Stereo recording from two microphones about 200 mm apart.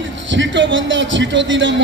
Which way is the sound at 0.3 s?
65° right (ahead or behind).